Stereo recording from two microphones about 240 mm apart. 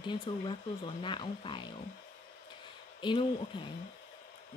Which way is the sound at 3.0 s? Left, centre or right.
Centre.